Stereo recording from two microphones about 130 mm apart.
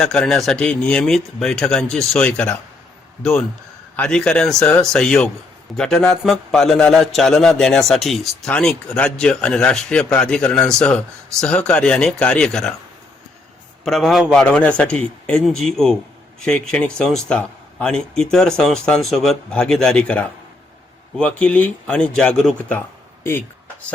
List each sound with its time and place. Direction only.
0.0 s a man's voice: 5° left (ahead or behind)
3.9 s a man's voice: 10° left (ahead or behind)
13.8 s a man's voice: centre (ahead or behind)
14.4 s a man's voice: 10° left (ahead or behind)